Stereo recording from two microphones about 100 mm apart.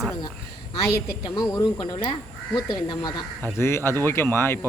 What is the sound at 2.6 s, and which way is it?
Speech, 45° left (ahead or behind).